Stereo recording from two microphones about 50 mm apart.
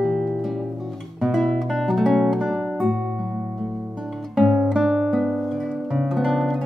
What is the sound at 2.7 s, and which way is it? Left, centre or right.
Music, centre.